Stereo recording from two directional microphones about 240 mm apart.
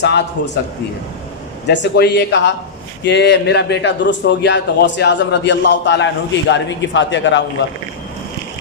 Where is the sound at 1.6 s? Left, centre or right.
Left.